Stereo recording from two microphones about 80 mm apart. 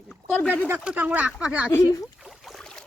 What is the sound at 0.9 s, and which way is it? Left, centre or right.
Speech, right.